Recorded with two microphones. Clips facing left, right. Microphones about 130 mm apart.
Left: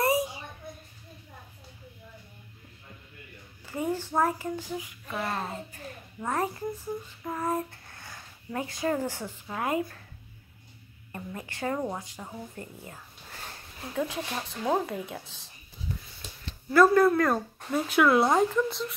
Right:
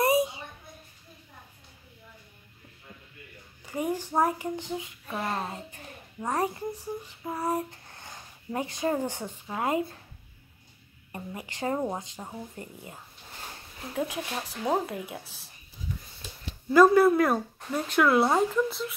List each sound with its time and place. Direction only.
0.0 s a sound: 20° right (ahead or behind)
3.6 s a child's voice: 15° right (ahead or behind)
11.1 s a woman's voice: 20° right (ahead or behind)
16.7 s speech: 15° right (ahead or behind)
17.8 s speech: centre (ahead or behind)